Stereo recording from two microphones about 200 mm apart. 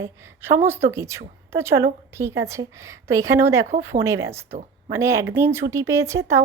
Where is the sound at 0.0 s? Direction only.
10° right (ahead or behind).